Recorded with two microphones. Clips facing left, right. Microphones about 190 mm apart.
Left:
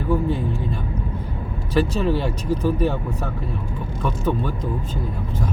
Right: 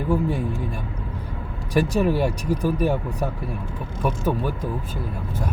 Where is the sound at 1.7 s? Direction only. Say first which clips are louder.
Even; 15° right (ahead or behind).